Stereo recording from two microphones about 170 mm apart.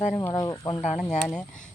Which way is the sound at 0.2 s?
20° left (ahead or behind).